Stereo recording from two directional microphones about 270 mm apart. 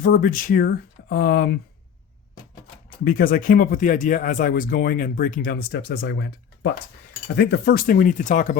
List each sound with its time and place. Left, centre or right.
0.0 s speech: left
3.0 s speech: left